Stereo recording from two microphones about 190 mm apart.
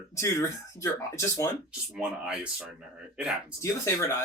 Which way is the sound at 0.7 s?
15° left (ahead or behind).